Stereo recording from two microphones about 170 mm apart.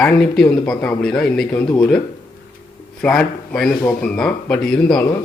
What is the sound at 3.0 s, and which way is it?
A man's voice, 5° left (ahead or behind).